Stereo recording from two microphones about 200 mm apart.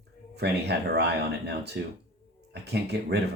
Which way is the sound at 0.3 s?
55° right (ahead or behind).